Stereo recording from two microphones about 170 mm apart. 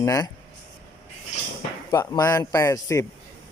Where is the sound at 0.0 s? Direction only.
20° left (ahead or behind).